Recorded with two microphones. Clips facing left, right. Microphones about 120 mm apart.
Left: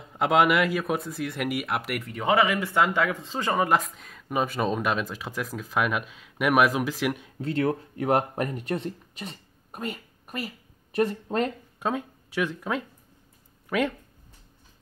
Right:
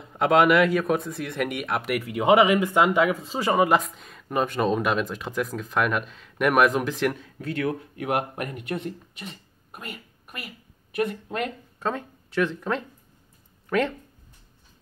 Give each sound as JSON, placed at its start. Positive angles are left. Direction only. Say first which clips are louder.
{"t": 0.1, "sound": "speech", "louder": "right 3 dB", "side_deg": 0}
{"t": 2.1, "sound": "speech", "louder": "right 5 dB", "side_deg": -20}
{"t": 7.2, "sound": "speech", "louder": "left 1 dB", "side_deg": 20}
{"t": 7.5, "sound": "speech", "louder": "left 2 dB", "side_deg": 30}
{"t": 11.8, "sound": "speech", "louder": "even", "side_deg": 10}